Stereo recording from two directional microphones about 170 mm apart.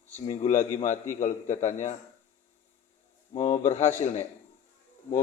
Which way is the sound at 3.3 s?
40° left (ahead or behind).